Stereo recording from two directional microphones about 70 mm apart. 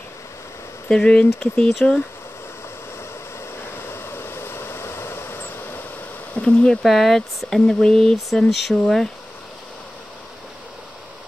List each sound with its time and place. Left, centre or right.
0.8 s speech: centre
1.7 s speech: centre
3.7 s vehicle: left
6.3 s speech: centre